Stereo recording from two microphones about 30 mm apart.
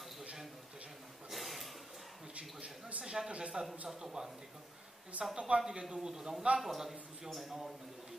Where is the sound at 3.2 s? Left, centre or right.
Right.